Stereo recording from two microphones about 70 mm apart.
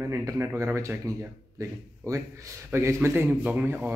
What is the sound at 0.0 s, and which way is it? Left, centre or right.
Speech, right.